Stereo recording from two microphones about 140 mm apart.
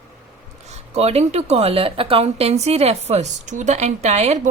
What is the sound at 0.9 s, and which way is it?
A woman's voice, 50° right (ahead or behind).